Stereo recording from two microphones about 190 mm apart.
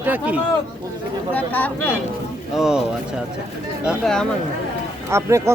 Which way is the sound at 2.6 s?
Centre (ahead or behind).